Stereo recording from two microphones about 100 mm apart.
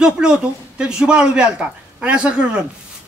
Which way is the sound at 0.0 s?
10° right (ahead or behind).